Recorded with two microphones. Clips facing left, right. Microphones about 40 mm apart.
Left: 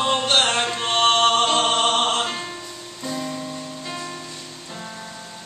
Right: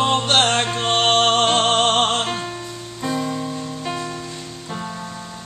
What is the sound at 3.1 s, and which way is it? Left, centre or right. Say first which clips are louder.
Music: right 4 dB; right.